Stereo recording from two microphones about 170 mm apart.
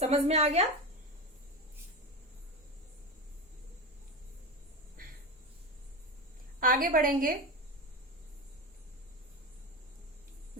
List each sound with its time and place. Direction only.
0.0 s speech: 40° right (ahead or behind)
5.0 s insect: 55° right (ahead or behind)
6.6 s a woman's voice: 55° right (ahead or behind)